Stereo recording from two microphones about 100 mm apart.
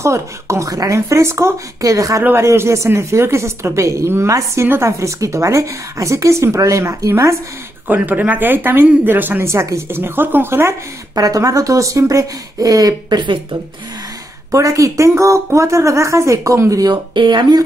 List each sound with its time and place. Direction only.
0.0 s a woman's voice: 30° right (ahead or behind)
2.2 s a woman's voice: 25° right (ahead or behind)
7.9 s speech: 15° right (ahead or behind)
11.1 s a woman's voice: 35° right (ahead or behind); by 13.6 s 55° right (ahead or behind)
14.5 s a woman's voice: 35° right (ahead or behind)
16.9 s speech: 50° right (ahead or behind)